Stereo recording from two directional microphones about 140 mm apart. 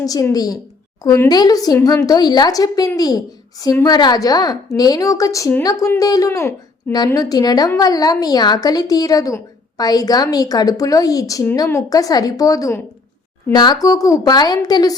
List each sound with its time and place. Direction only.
0.0 s a woman's voice: 25° left (ahead or behind)